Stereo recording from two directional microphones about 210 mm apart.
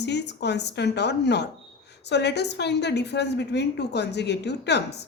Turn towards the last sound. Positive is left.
turn(degrees=55)  # may be behind; listen again after turning